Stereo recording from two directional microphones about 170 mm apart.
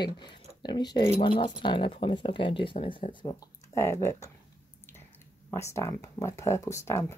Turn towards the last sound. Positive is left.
turn(degrees=15)  # may be behind; listen again after turning